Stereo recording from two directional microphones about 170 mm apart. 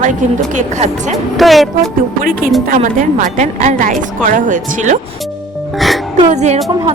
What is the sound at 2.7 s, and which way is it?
A woman's voice, 55° right (ahead or behind).